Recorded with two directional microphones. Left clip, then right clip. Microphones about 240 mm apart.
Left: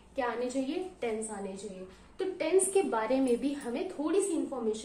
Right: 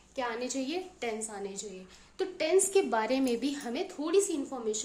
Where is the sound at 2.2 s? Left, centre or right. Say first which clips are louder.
Right 1 dB; right.